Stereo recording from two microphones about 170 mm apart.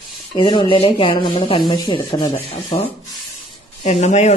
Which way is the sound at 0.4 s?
30° left (ahead or behind).